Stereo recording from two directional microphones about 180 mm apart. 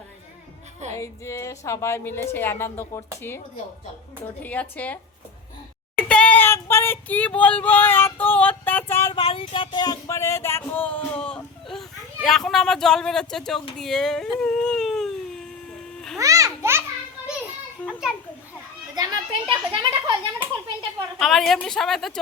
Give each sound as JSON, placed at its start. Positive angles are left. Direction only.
{"t": 0.9, "sound": "a woman's voice", "side_deg": 15}
{"t": 4.4, "sound": "a woman's voice", "side_deg": 10}
{"t": 6.1, "sound": "child singing", "side_deg": 5}
{"t": 9.1, "sound": "music", "side_deg": 30}
{"t": 16.1, "sound": "babbling", "side_deg": -20}
{"t": 17.8, "sound": "children playing", "side_deg": 10}
{"t": 18.9, "sound": "a child's voice", "side_deg": -25}
{"t": 21.2, "sound": "music", "side_deg": 0}